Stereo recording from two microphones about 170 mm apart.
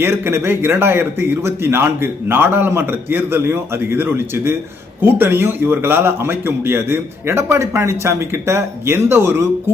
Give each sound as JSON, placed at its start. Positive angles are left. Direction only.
{"t": 0.0, "sound": "a man's voice", "side_deg": -15}